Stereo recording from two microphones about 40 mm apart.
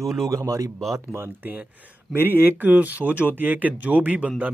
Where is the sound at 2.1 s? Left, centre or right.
Right.